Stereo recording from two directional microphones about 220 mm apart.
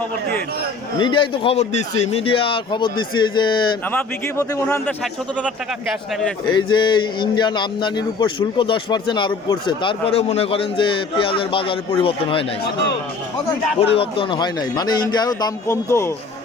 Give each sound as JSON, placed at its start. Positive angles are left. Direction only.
{"t": 0.9, "sound": "a man's voice", "side_deg": 25}
{"t": 6.5, "sound": "a man's voice", "side_deg": 20}
{"t": 13.8, "sound": "a man's voice", "side_deg": 25}